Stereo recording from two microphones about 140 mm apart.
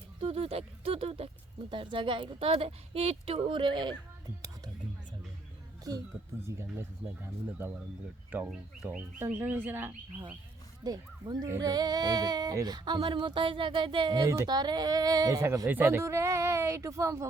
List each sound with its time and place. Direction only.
0.2 s a sound: 45° right (ahead or behind)
1.7 s speech: 35° right (ahead or behind)
6.6 s speech: 15° right (ahead or behind)
10.8 s speech: 30° right (ahead or behind)